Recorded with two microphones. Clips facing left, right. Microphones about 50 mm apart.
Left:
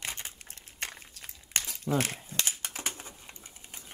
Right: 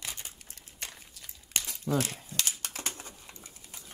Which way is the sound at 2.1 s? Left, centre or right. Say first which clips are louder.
Left 1 dB; left.